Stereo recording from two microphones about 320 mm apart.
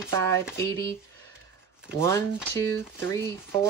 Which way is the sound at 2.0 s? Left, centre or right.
Centre.